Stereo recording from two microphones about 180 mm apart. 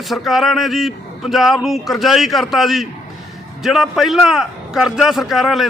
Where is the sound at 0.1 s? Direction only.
Centre (ahead or behind).